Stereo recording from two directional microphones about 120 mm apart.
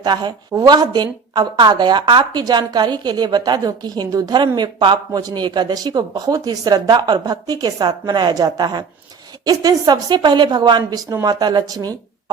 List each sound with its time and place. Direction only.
0.0 s a woman's voice: 35° right (ahead or behind)